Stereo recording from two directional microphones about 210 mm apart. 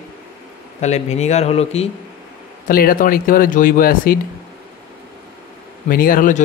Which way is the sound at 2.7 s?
45° left (ahead or behind).